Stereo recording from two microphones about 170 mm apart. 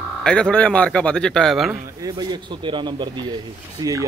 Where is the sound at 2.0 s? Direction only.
25° right (ahead or behind).